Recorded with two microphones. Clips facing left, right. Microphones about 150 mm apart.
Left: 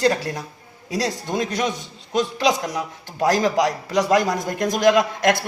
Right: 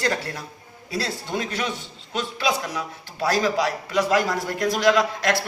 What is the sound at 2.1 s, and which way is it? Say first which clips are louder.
Speech: left 7 dB; 40° left (ahead or behind).